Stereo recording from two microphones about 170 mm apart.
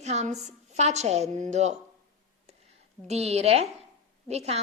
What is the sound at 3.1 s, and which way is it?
A woman's voice, 40° right (ahead or behind).